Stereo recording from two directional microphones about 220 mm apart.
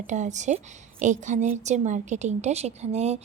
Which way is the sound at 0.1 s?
35° right (ahead or behind).